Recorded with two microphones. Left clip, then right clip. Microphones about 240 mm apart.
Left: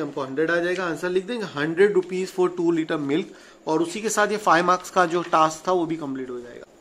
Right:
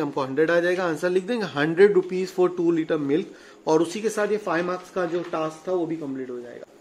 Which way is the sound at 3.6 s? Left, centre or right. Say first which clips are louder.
Right 2 dB; centre.